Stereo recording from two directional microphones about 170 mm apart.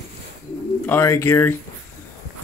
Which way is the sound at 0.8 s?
15° left (ahead or behind).